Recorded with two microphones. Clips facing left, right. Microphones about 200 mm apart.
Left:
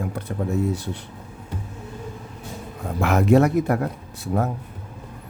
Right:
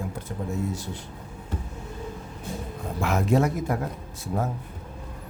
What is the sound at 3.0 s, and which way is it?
Speech, 65° left (ahead or behind).